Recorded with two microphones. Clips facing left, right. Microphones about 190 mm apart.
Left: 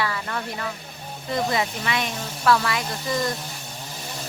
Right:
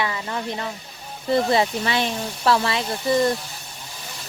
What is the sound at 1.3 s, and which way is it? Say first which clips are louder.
Speech: right 5 dB; 30° right (ahead or behind).